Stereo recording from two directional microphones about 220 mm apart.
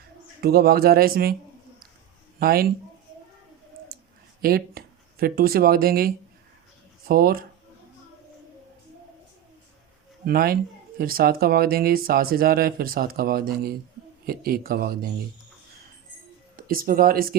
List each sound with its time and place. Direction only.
0.4 s speech: 45° right (ahead or behind)
2.4 s speech: 45° right (ahead or behind)
4.4 s speech: 45° right (ahead or behind)
10.2 s speech: 45° right (ahead or behind)
16.6 s speech: 40° right (ahead or behind)